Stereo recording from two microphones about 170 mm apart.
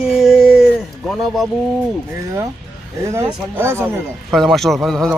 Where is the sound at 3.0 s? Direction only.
15° right (ahead or behind).